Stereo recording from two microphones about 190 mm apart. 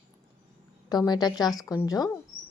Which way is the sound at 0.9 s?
20° left (ahead or behind).